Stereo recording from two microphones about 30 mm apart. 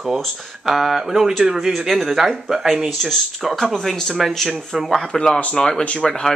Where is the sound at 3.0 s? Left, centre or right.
Centre.